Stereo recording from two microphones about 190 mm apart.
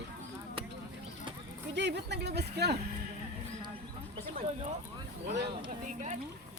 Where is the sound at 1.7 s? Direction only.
65° right (ahead or behind).